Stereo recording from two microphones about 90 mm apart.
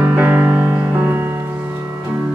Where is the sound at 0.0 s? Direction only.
15° right (ahead or behind).